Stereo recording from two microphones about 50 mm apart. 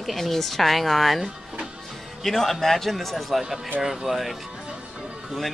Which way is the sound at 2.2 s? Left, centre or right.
Centre.